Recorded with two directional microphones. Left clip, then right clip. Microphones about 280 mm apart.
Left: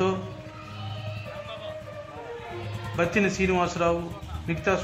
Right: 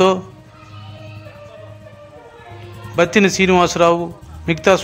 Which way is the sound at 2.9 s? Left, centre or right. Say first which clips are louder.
Right 11 dB; right.